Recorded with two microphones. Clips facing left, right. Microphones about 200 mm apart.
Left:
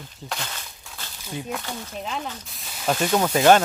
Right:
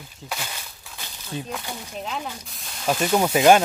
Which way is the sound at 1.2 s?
15° left (ahead or behind).